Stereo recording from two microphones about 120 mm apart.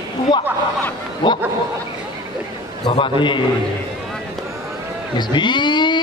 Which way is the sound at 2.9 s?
45° left (ahead or behind).